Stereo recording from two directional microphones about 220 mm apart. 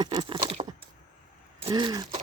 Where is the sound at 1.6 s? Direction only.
20° right (ahead or behind).